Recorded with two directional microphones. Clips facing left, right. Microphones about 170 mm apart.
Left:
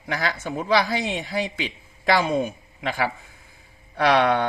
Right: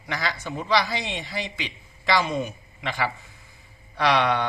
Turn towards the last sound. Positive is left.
turn(degrees=50)  # may be behind; listen again after turning